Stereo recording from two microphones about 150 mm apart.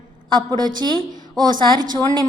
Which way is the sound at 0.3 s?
30° right (ahead or behind).